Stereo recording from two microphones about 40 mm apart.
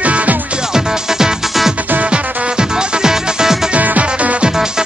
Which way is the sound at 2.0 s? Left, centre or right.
Right.